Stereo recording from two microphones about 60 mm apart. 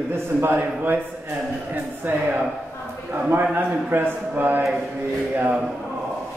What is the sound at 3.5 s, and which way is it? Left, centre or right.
A man's voice, right.